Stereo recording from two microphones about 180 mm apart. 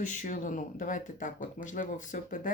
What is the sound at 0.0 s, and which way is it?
Speech, 45° left (ahead or behind).